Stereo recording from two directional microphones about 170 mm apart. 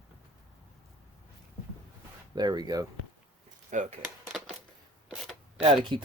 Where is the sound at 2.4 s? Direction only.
25° right (ahead or behind).